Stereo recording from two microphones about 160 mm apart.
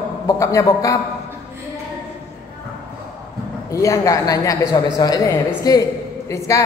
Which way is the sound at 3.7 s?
20° left (ahead or behind).